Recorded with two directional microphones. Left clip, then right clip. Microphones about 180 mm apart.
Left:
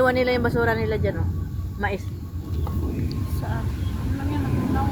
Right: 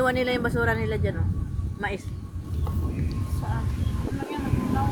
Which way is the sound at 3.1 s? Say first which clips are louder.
Left 3 dB; 45° right (ahead or behind).